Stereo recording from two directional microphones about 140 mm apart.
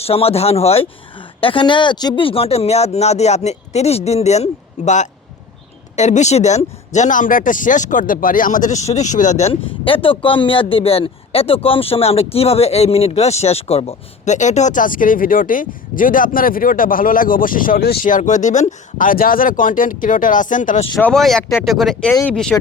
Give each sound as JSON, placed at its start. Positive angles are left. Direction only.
{"t": 0.0, "sound": "speech", "side_deg": 45}
{"t": 6.0, "sound": "speech", "side_deg": 55}
{"t": 9.5, "sound": "speech", "side_deg": 40}
{"t": 21.0, "sound": "speech", "side_deg": 5}
{"t": 22.1, "sound": "speech", "side_deg": 15}